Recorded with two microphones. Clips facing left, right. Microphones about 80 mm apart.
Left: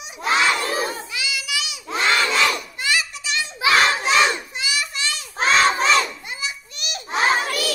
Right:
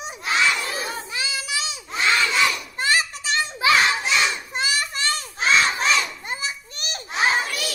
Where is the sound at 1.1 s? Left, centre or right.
Right.